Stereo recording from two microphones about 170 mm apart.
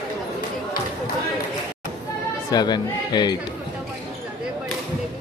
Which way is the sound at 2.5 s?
25° left (ahead or behind).